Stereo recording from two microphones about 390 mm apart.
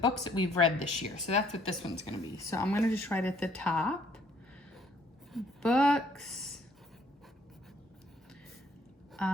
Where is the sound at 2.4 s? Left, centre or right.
Centre.